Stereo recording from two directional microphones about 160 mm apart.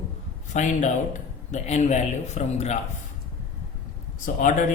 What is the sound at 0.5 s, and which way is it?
A man's voice, 50° left (ahead or behind).